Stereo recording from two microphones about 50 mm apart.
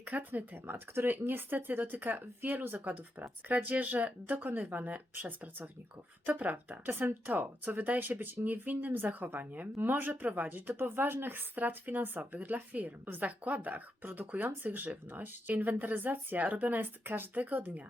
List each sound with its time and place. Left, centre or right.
0.0 s speech: right